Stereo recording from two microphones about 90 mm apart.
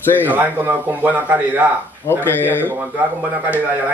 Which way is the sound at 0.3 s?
20° right (ahead or behind).